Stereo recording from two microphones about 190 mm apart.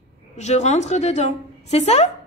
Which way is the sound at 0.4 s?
35° left (ahead or behind).